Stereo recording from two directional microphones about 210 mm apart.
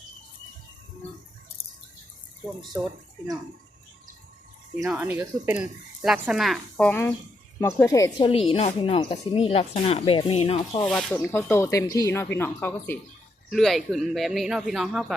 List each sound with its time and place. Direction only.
4.9 s speech: 10° right (ahead or behind); by 8.3 s 15° left (ahead or behind)
8.4 s speech: 30° left (ahead or behind)
10.8 s speech: 5° left (ahead or behind)